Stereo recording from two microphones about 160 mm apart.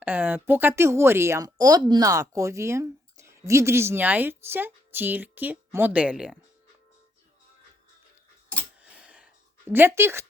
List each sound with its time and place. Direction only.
0.0 s speech: 10° right (ahead or behind)
8.8 s a sound: 5° right (ahead or behind)
9.7 s speech: 15° right (ahead or behind)